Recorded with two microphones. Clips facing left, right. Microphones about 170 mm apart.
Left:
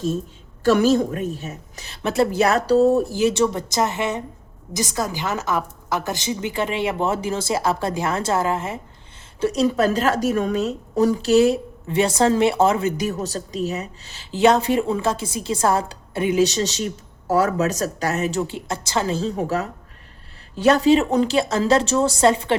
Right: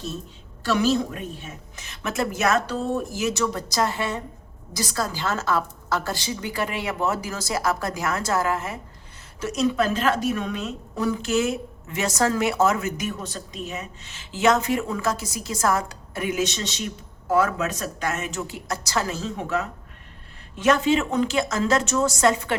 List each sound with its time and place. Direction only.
0.6 s a woman's voice: 50° left (ahead or behind); by 22.5 s 30° left (ahead or behind)